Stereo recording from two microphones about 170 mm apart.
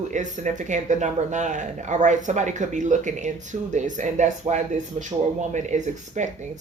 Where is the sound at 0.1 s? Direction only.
45° right (ahead or behind).